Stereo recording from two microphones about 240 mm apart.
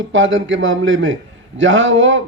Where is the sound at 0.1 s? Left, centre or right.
Right.